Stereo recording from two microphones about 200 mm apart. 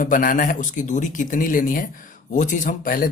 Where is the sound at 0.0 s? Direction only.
40° left (ahead or behind).